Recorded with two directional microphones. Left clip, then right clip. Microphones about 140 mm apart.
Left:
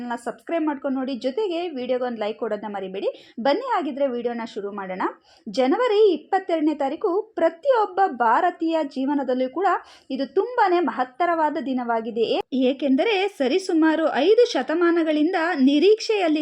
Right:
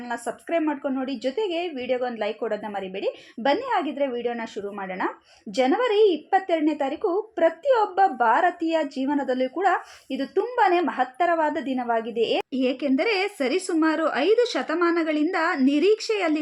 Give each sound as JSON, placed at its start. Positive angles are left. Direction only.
{"t": 0.0, "sound": "a woman's voice", "side_deg": 40}